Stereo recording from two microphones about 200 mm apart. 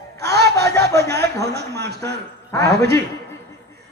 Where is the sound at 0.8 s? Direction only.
55° right (ahead or behind).